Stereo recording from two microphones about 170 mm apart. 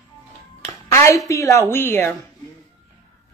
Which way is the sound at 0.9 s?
15° left (ahead or behind).